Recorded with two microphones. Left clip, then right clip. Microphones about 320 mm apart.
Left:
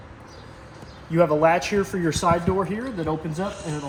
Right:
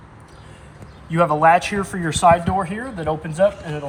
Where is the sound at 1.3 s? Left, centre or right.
Right.